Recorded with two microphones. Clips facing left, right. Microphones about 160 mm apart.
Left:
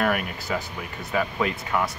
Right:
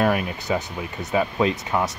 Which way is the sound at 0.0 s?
25° right (ahead or behind).